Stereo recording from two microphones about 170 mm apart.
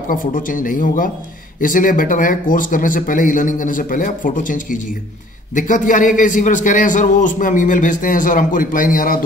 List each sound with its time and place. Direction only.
0.1 s a man's voice: 50° left (ahead or behind)